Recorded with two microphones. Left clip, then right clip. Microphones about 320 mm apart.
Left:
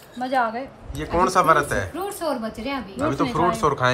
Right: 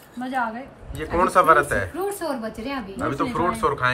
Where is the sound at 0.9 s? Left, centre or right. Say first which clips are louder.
Right 1 dB; centre.